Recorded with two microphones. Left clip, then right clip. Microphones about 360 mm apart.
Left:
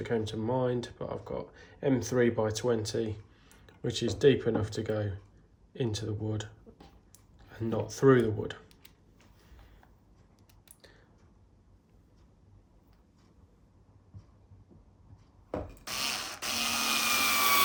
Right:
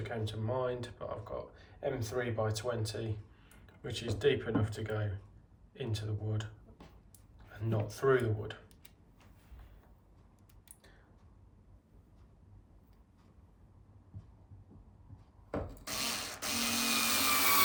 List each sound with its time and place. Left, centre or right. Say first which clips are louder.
0.0 s speech: left 8 dB; centre
7.5 s speech: left 5 dB; centre
15.9 s printer: left 4 dB; centre
16.7 s a sound: left 4 dB; centre